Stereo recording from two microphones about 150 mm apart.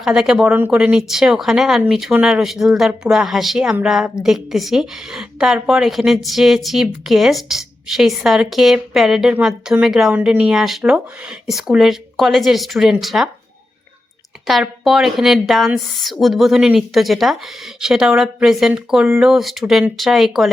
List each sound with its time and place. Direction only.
0.0 s a woman's voice: 5° right (ahead or behind)
14.4 s a woman's voice: centre (ahead or behind)